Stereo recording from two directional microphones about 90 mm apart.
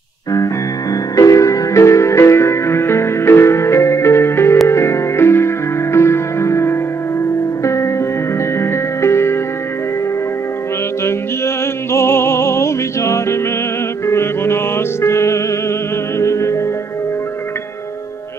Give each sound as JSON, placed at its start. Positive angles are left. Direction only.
{"t": 1.1, "sound": "music", "side_deg": 40}
{"t": 11.1, "sound": "music", "side_deg": 30}